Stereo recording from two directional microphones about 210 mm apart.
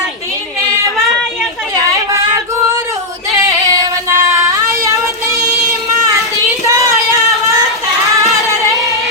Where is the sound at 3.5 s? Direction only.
15° right (ahead or behind).